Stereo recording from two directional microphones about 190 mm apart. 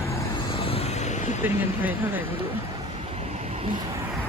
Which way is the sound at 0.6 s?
30° left (ahead or behind).